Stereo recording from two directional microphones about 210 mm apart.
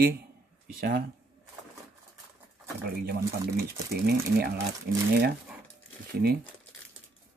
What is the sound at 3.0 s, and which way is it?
Speech, 45° right (ahead or behind).